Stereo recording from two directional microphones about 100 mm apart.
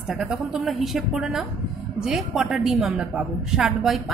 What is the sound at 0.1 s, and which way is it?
A woman's voice, 5° right (ahead or behind).